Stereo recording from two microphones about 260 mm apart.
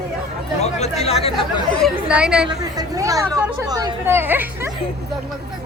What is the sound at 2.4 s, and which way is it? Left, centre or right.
Speech, centre.